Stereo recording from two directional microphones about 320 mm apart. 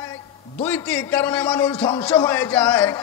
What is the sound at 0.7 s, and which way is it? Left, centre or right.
A man's voice, centre.